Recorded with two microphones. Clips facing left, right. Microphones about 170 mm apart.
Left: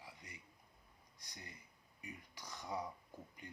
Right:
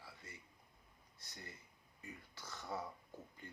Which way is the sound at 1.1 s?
15° left (ahead or behind).